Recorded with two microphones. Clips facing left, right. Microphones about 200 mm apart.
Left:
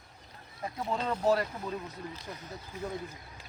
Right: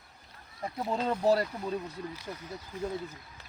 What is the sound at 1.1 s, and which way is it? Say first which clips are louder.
Speech: right 2 dB; 35° right (ahead or behind).